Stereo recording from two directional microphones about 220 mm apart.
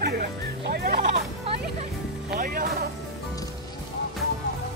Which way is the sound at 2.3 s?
40° right (ahead or behind).